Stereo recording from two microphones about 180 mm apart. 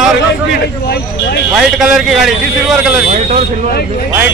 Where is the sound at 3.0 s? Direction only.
40° right (ahead or behind).